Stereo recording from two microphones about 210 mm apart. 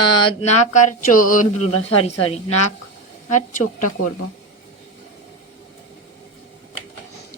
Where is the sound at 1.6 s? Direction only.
90° left.